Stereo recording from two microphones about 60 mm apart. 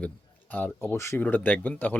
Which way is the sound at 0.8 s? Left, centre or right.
Left.